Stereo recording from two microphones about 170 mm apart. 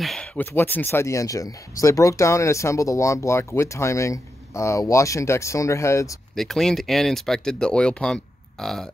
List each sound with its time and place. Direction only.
0.0 s speech: 5° left (ahead or behind)
6.3 s speech: centre (ahead or behind)